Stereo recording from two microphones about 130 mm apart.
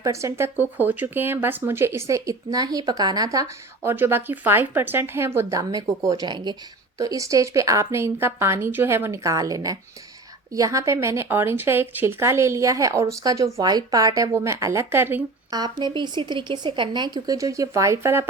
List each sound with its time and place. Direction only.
0.0 s speech: 25° right (ahead or behind)
3.8 s speech: 15° right (ahead or behind)
15.4 s speech: 30° right (ahead or behind)